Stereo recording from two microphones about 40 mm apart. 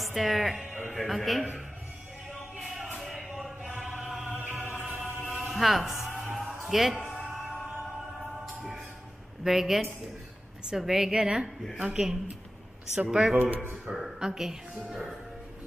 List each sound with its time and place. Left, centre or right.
0.0 s a man's voice: centre
2.6 s music: centre
3.0 s a sound: centre
4.4 s music: right
5.0 s music: centre
7.1 s music: centre
9.4 s a woman's voice: centre
13.4 s speech: right
13.8 s a woman's voice: centre